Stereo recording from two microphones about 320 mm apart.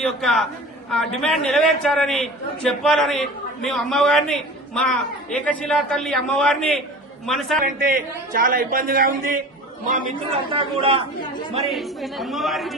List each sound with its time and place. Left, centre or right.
0.0 s a man's voice: centre
7.6 s a man's voice: right
11.6 s a man's voice: centre